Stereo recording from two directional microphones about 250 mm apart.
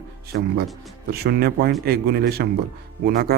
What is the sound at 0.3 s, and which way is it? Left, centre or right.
A man's voice, right.